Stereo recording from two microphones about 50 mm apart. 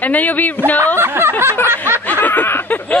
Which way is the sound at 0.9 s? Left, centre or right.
Right.